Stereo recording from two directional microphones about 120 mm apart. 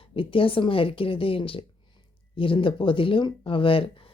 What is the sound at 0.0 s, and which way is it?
Speech, 50° left (ahead or behind).